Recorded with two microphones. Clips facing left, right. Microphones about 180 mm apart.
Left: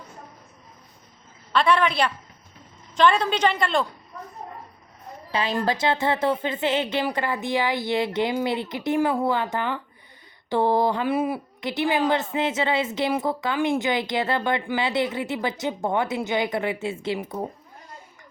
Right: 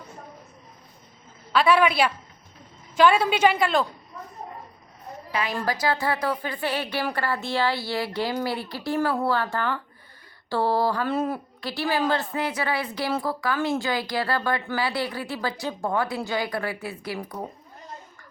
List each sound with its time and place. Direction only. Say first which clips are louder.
1.5 s a woman's voice: right 1 dB; 5° right (ahead or behind)
5.3 s a woman's voice: left 3 dB; 30° left (ahead or behind)